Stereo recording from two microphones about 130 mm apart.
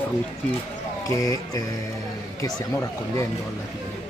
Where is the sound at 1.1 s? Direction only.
25° left (ahead or behind).